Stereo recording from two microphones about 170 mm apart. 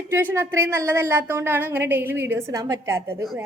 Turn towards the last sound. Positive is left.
turn(degrees=-15)  # may be behind; listen again after turning